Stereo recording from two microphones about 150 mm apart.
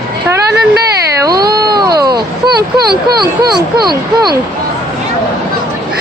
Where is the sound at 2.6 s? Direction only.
90° right.